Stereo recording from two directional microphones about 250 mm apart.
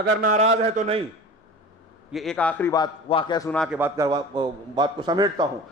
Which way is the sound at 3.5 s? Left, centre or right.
Centre.